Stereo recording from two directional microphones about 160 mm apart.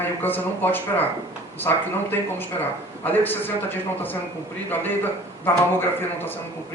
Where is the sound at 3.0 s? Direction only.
10° left (ahead or behind).